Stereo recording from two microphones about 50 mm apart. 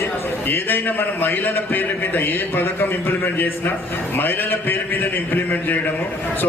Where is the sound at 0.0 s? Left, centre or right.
Left.